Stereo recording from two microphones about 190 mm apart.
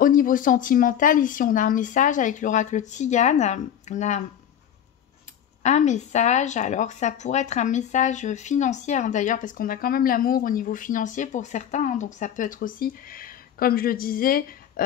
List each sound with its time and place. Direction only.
0.0 s speech: 45° left (ahead or behind)
5.6 s speech: 40° left (ahead or behind)